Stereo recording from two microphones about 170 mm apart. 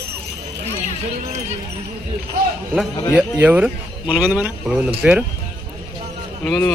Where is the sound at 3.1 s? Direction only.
5° right (ahead or behind).